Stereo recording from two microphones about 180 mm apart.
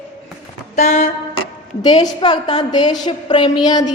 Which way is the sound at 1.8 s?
25° left (ahead or behind).